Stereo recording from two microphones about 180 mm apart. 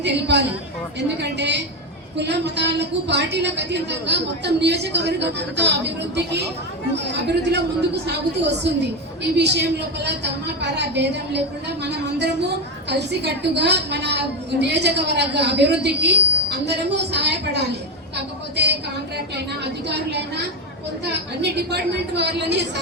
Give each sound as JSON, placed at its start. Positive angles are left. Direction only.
{"t": 0.0, "sound": "a woman's voice", "side_deg": -70}
{"t": 18.5, "sound": "music", "side_deg": -70}
{"t": 21.4, "sound": "a woman's voice", "side_deg": -70}